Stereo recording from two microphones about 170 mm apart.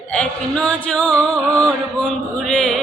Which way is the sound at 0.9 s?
10° left (ahead or behind).